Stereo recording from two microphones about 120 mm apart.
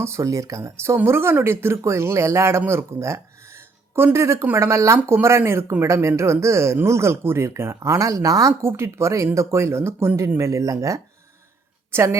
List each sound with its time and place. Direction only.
0.0 s a woman's voice: 25° right (ahead or behind)